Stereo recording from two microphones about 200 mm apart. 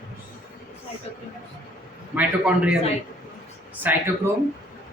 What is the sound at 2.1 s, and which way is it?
Speech, 5° right (ahead or behind).